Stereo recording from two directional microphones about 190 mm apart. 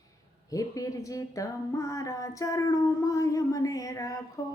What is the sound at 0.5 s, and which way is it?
Speech, 15° left (ahead or behind).